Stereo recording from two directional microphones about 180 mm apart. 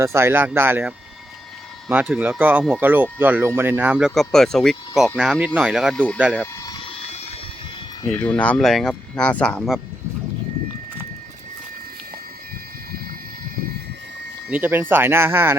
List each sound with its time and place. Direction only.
0.0 s speech: 15° right (ahead or behind)
6.7 s a sound: 35° left (ahead or behind)
8.0 s speech: 5° left (ahead or behind)
14.5 s speech: 10° right (ahead or behind)